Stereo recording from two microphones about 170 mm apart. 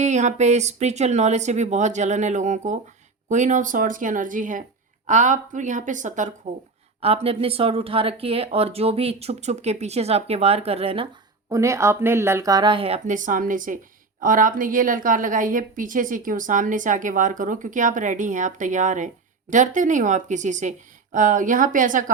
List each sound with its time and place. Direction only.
0.0 s a woman's voice: 45° right (ahead or behind)
7.0 s speech: 35° right (ahead or behind)
11.5 s a woman's voice: 15° right (ahead or behind); by 22.1 s 50° right (ahead or behind)